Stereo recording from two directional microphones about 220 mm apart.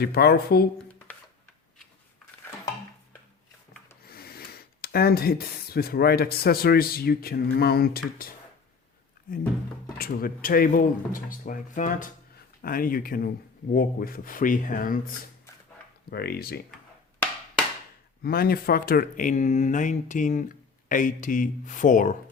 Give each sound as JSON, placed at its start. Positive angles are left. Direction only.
{"t": 0.0, "sound": "speech", "side_deg": 45}
{"t": 0.9, "sound": "a sound", "side_deg": 5}
{"t": 4.0, "sound": "speech", "side_deg": 45}
{"t": 10.0, "sound": "speech", "side_deg": 40}
{"t": 16.0, "sound": "speech", "side_deg": 45}
{"t": 18.2, "sound": "speech", "side_deg": 45}